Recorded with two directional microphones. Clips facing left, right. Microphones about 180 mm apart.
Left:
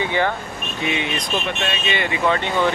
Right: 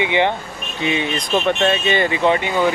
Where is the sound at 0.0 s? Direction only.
20° right (ahead or behind).